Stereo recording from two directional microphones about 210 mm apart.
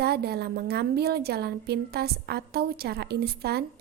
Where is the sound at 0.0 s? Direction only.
50° right (ahead or behind).